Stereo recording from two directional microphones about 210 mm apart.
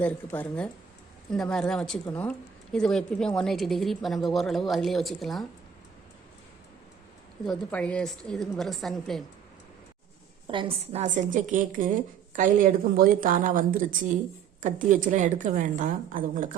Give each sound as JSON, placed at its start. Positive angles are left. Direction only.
{"t": 0.0, "sound": "a woman's voice", "side_deg": 5}
{"t": 7.4, "sound": "a woman's voice", "side_deg": 5}
{"t": 10.4, "sound": "a woman's voice", "side_deg": -25}
{"t": 11.0, "sound": "a woman's voice", "side_deg": -35}